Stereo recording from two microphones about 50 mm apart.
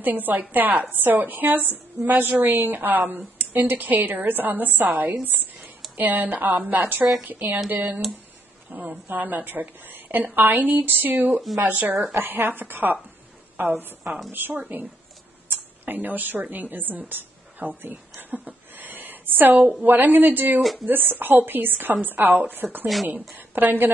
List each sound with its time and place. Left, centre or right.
0.0 s a woman's voice: right